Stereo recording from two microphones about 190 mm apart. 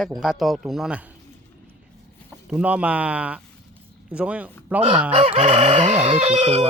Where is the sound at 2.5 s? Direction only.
5° right (ahead or behind).